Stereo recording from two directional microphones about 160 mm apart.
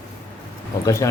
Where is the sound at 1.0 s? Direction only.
20° left (ahead or behind).